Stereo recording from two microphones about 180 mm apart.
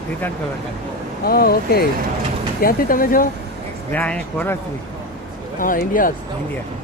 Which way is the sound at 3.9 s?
10° left (ahead or behind).